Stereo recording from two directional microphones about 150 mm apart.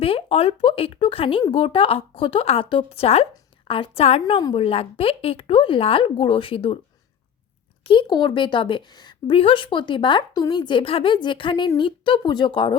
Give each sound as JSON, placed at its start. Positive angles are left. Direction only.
{"t": 0.0, "sound": "a woman's voice", "side_deg": 40}
{"t": 7.9, "sound": "a woman's voice", "side_deg": 30}